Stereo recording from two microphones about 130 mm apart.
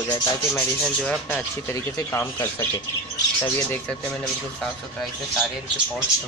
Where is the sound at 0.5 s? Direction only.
5° left (ahead or behind).